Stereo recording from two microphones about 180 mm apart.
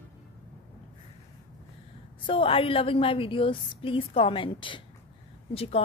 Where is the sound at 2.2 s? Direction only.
30° left (ahead or behind).